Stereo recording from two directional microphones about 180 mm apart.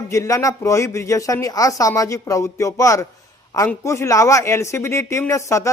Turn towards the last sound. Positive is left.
turn(degrees=15)  # may be behind; listen again after turning